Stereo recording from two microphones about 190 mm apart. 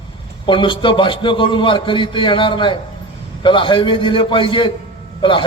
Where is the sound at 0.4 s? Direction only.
25° left (ahead or behind).